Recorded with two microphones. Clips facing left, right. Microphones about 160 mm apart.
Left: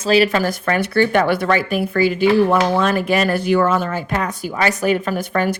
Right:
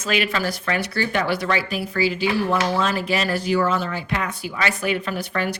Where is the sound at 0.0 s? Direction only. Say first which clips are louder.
Left 8 dB; 35° left (ahead or behind).